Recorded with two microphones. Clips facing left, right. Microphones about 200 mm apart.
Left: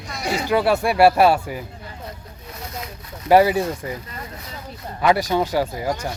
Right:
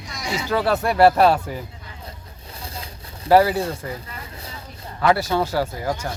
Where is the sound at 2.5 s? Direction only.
30° right (ahead or behind).